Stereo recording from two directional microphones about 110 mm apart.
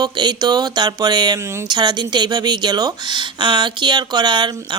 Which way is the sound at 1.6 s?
40° right (ahead or behind).